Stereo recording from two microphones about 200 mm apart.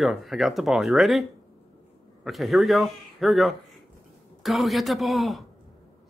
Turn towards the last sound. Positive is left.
turn(degrees=0)  # may be behind; listen again after turning